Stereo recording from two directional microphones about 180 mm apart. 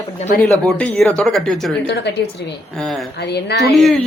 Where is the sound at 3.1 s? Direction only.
65° left (ahead or behind).